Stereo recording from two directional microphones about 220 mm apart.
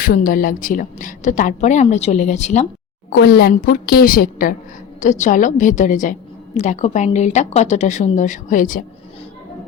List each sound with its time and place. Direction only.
0.0 s a woman's voice: 40° left (ahead or behind)
3.2 s a woman's voice: 45° left (ahead or behind)